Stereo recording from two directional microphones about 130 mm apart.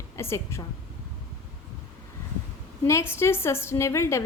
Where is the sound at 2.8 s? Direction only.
20° left (ahead or behind).